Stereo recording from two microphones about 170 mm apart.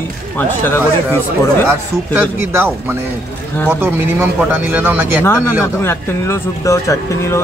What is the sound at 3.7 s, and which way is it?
Speech, 10° right (ahead or behind).